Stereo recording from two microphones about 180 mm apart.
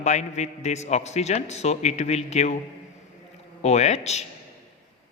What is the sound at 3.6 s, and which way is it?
Speech, 40° left (ahead or behind).